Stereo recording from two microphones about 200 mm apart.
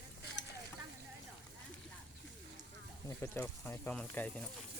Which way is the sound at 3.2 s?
10° left (ahead or behind).